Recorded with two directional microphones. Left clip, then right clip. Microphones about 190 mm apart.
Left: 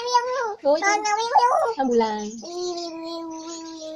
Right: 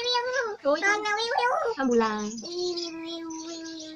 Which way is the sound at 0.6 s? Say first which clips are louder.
Left 5 dB; 10° right (ahead or behind).